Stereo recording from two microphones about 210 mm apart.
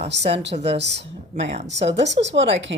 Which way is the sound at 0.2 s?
30° right (ahead or behind).